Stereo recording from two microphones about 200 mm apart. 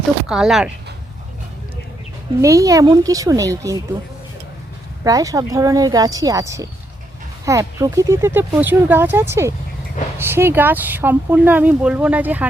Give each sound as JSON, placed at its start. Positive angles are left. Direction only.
{"t": 0.3, "sound": "speech", "side_deg": -5}
{"t": 2.4, "sound": "speech", "side_deg": -15}
{"t": 5.0, "sound": "speech", "side_deg": -15}